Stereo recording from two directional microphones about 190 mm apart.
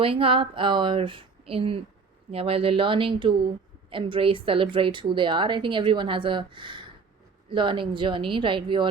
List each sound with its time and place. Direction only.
0.0 s a woman's voice: 30° right (ahead or behind)